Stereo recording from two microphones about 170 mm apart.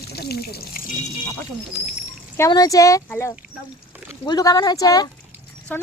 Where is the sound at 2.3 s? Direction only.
20° left (ahead or behind).